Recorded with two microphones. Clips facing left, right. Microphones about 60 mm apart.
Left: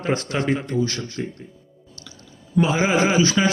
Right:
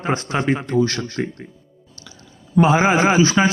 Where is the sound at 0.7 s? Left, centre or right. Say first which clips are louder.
Right 5 dB; right.